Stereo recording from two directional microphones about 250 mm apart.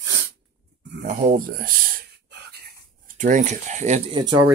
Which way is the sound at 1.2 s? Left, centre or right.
Right.